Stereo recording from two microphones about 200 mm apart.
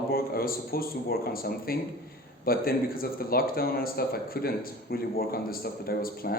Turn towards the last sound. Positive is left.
turn(degrees=50)  # may be behind; listen again after turning